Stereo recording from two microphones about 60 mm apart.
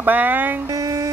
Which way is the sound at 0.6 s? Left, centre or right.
Right.